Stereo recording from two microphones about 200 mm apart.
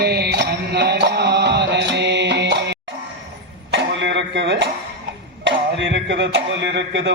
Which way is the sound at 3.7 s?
65° right (ahead or behind).